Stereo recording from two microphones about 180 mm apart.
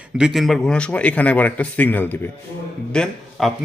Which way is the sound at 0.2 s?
Centre (ahead or behind).